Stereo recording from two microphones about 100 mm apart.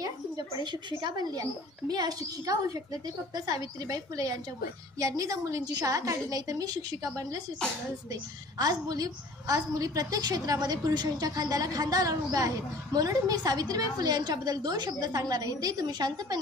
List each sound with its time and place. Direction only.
0.0 s a woman's voice: 45° right (ahead or behind)